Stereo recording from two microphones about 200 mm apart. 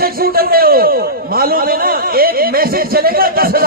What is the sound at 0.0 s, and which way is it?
A man's voice, 50° right (ahead or behind).